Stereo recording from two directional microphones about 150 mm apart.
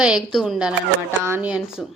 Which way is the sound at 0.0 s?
5° right (ahead or behind).